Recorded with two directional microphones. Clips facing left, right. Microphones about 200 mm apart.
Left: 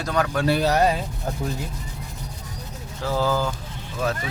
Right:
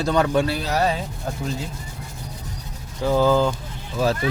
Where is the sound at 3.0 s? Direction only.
20° right (ahead or behind).